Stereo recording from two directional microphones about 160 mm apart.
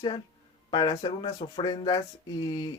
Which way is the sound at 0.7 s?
25° left (ahead or behind).